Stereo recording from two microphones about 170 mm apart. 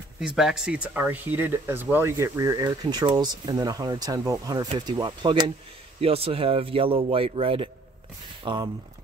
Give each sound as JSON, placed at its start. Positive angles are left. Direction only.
{"t": 0.2, "sound": "speech", "side_deg": -5}